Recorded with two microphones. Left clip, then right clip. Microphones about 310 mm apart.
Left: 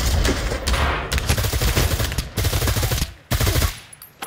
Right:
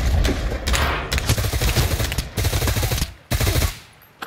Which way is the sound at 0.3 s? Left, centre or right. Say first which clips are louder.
Left 2 dB; centre.